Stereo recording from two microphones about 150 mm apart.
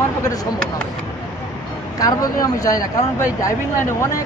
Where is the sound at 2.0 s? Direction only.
25° left (ahead or behind).